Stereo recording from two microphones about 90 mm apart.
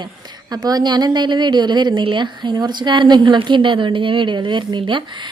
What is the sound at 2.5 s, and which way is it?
A woman's voice, 55° right (ahead or behind).